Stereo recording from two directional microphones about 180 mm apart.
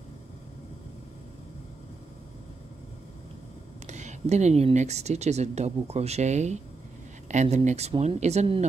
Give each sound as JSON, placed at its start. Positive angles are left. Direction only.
{"t": 3.8, "sound": "speech", "side_deg": -40}